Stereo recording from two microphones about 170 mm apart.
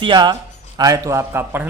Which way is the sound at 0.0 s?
25° right (ahead or behind).